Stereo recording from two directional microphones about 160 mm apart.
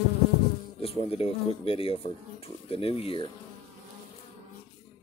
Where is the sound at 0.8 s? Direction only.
35° left (ahead or behind).